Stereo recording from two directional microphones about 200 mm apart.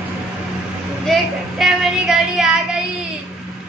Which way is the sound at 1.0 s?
Centre (ahead or behind).